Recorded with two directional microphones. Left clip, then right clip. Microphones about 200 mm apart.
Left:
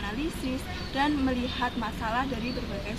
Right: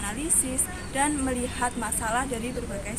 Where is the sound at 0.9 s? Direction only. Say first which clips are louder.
Right 1 dB; 20° right (ahead or behind).